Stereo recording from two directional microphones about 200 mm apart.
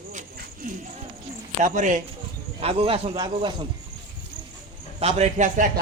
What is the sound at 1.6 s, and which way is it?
A man's voice, 40° right (ahead or behind).